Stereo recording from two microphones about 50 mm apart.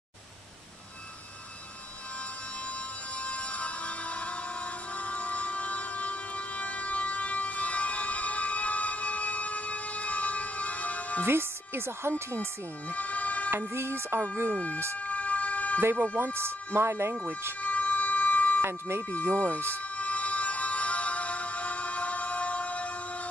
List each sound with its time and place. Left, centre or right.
3.2 s music: left
11.2 s speech: right
12.9 s a sound: left
13.7 s speech: right
14.5 s speech: left
15.0 s vehicle: left
16.3 s speech: right
17.6 s emergency vehicle: left
18.6 s speech: right
19.3 s speech: left
20.0 s music: left